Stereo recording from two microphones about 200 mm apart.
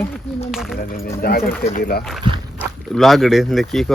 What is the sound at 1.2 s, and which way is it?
Speech, 45° left (ahead or behind).